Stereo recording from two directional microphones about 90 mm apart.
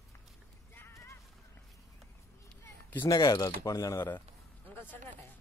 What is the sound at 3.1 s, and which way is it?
Speech, 40° left (ahead or behind).